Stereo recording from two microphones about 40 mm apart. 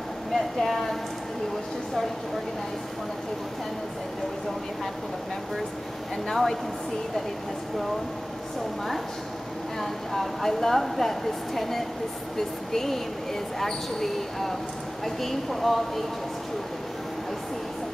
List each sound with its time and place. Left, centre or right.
0.3 s speech: centre
6.2 s speech: centre
9.8 s speech: centre